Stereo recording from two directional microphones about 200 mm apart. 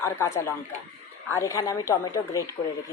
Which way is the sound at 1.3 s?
15° left (ahead or behind).